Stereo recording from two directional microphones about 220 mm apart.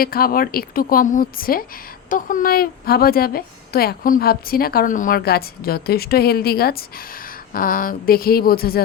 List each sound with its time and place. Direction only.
0.0 s a woman's voice: 40° left (ahead or behind)